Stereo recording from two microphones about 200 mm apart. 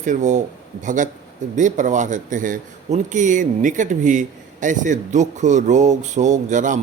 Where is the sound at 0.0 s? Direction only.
40° right (ahead or behind).